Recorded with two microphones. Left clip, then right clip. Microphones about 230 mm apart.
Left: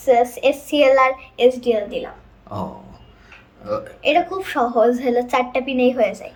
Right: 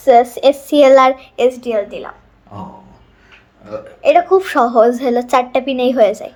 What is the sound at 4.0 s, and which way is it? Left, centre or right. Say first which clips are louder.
A woman's voice: right 8 dB; centre.